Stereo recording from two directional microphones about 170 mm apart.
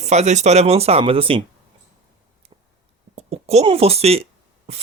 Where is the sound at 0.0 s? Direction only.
40° right (ahead or behind).